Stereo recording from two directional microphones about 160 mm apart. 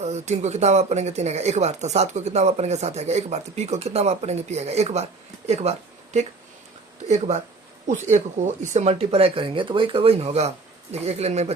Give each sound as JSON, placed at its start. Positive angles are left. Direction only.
{"t": 0.0, "sound": "speech", "side_deg": -45}
{"t": 7.1, "sound": "speech", "side_deg": -45}